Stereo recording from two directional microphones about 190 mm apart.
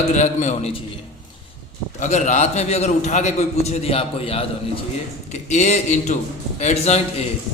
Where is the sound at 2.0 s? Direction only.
40° left (ahead or behind).